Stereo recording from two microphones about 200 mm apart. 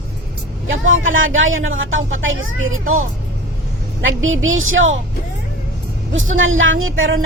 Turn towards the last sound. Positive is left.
turn(degrees=-85)